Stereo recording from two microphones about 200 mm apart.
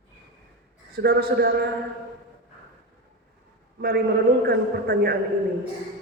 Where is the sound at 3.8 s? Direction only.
50° right (ahead or behind).